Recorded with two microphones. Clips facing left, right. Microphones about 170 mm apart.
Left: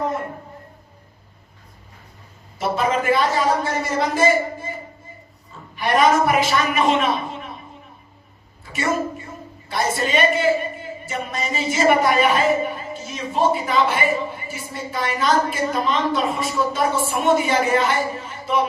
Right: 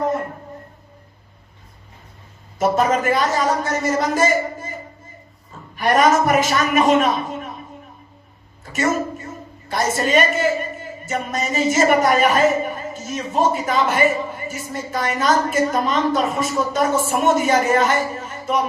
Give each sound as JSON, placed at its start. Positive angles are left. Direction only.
{"t": 2.6, "sound": "a man's voice", "side_deg": -45}
{"t": 5.7, "sound": "a man's voice", "side_deg": -45}
{"t": 9.6, "sound": "a man's voice", "side_deg": -45}